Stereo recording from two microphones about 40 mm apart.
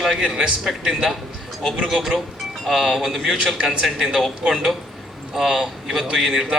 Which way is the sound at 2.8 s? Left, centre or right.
Centre.